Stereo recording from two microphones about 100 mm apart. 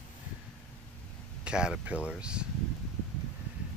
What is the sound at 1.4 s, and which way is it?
Speech, 10° right (ahead or behind).